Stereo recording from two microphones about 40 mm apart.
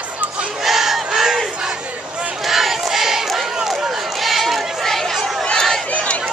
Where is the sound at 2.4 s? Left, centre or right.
Centre.